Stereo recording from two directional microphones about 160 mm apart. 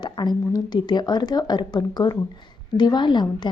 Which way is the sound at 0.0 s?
30° left (ahead or behind).